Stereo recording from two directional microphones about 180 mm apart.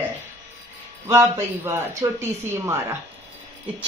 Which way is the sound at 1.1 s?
15° right (ahead or behind).